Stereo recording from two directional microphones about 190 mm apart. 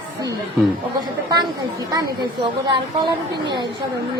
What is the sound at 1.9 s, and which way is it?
A woman's voice, 20° right (ahead or behind).